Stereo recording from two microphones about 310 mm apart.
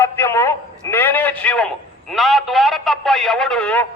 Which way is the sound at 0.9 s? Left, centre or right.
Centre.